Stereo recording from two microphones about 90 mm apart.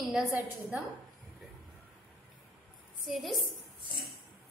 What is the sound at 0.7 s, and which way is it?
Speech, 15° right (ahead or behind).